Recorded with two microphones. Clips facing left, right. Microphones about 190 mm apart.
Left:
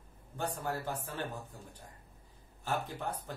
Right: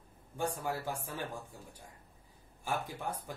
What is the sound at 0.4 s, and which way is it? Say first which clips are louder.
A man's voice: right 1 dB; 10° right (ahead or behind).